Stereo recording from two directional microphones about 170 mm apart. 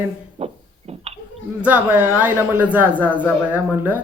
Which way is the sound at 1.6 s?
10° right (ahead or behind).